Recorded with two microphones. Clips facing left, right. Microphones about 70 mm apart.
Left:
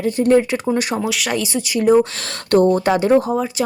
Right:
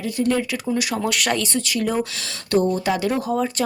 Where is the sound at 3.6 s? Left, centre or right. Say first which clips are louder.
Left 4 dB; centre.